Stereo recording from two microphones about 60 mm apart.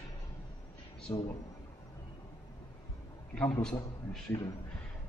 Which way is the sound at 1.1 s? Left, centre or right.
Left.